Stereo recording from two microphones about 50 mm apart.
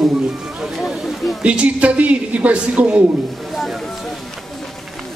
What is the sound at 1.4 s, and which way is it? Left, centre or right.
A man's voice, right.